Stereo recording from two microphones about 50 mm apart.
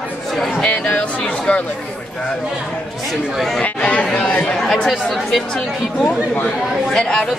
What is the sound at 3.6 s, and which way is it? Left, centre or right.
Speech, left.